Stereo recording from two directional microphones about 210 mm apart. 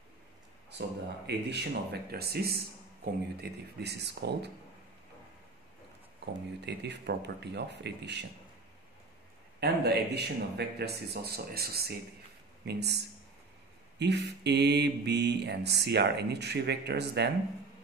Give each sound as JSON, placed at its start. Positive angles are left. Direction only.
{"t": 0.7, "sound": "speech", "side_deg": -55}
{"t": 6.6, "sound": "speech", "side_deg": -55}
{"t": 9.6, "sound": "speech", "side_deg": -50}